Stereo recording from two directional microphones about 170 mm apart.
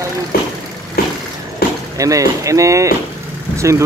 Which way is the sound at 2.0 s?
20° right (ahead or behind).